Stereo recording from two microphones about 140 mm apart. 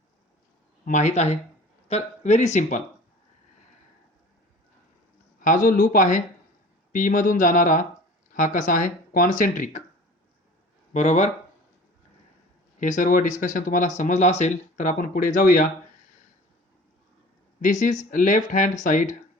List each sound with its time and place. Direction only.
0.9 s speech: 60° left (ahead or behind)
5.4 s speech: 70° left (ahead or behind)
10.9 s speech: 60° left (ahead or behind)
12.8 s speech: 70° left (ahead or behind)
17.6 s speech: 65° left (ahead or behind)